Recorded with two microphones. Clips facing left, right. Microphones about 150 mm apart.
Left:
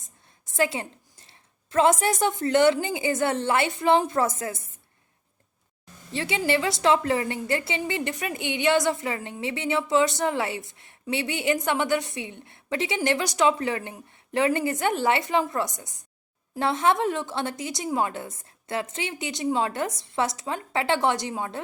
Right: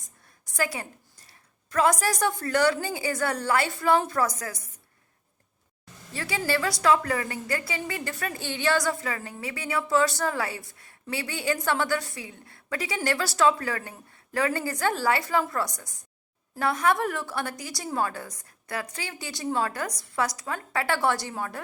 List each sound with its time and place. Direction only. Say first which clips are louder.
0.5 s a woman's voice: left 4 dB; 25° left (ahead or behind)
6.1 s a woman's voice: left 3 dB; 25° left (ahead or behind)